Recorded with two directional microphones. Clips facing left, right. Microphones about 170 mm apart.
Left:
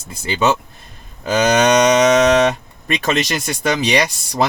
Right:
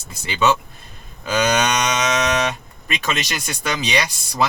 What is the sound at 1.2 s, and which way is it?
Speech, 40° left (ahead or behind).